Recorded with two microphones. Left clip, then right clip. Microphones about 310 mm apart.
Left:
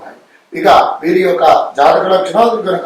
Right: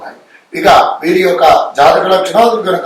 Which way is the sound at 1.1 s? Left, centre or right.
Centre.